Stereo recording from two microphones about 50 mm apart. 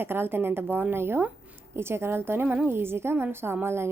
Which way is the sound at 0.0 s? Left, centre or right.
Right.